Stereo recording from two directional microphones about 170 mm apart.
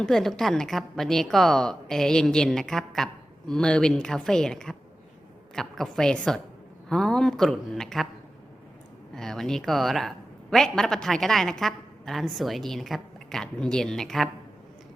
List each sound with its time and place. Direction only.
0.0 s a man's voice: 5° left (ahead or behind)
9.1 s a man's voice: centre (ahead or behind)